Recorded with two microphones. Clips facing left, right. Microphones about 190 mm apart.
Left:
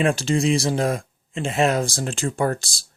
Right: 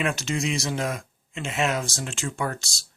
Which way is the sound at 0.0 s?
30° left (ahead or behind).